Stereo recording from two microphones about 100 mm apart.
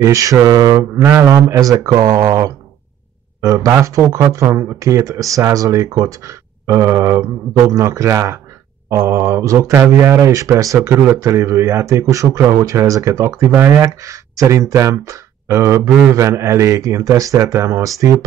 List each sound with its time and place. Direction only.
0.0 s speech: 35° right (ahead or behind)